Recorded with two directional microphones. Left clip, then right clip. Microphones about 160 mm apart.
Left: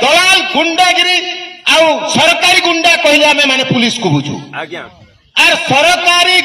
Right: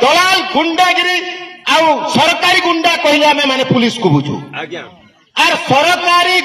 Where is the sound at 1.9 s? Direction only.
35° left (ahead or behind).